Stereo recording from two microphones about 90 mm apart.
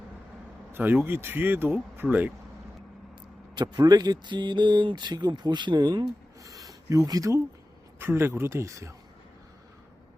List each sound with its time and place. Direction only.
0.7 s speech: 20° right (ahead or behind)
3.5 s speech: 55° right (ahead or behind)
6.4 s speech: 40° right (ahead or behind)
7.9 s speech: 25° right (ahead or behind)